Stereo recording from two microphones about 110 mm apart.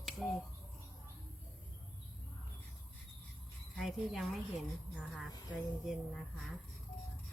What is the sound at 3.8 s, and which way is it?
Speech, centre (ahead or behind).